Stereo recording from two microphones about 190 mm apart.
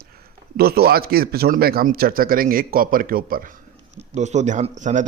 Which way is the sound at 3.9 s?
35° right (ahead or behind).